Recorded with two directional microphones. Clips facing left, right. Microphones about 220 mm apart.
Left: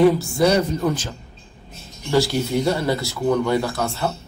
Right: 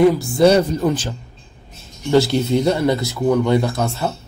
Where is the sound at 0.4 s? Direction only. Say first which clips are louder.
Right 7 dB; 30° right (ahead or behind).